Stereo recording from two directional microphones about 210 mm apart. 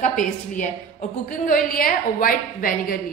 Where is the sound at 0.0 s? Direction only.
40° left (ahead or behind).